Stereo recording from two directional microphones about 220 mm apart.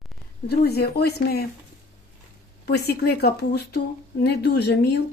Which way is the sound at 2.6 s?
45° left (ahead or behind).